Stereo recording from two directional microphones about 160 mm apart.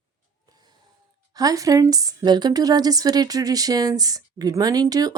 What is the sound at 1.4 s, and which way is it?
A woman's voice, 20° right (ahead or behind).